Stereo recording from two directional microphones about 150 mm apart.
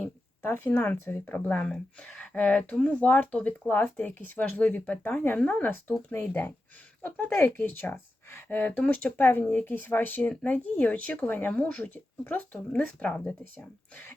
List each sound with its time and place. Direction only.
0.0 s a woman's voice: 15° left (ahead or behind)